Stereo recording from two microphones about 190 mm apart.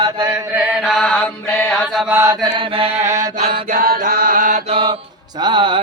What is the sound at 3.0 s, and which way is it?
Mantra, 15° right (ahead or behind).